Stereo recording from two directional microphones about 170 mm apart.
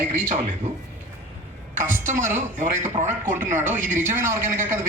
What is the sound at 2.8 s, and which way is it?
Speech, 45° right (ahead or behind).